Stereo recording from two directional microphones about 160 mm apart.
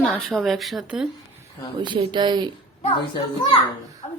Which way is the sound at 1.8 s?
30° right (ahead or behind).